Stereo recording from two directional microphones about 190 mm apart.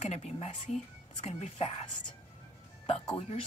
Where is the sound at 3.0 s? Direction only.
30° left (ahead or behind).